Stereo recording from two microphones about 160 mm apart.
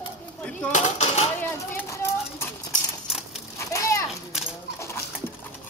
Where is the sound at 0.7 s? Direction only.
50° left (ahead or behind).